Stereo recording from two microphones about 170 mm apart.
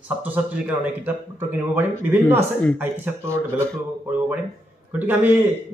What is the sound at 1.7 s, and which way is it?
Speech, 10° right (ahead or behind).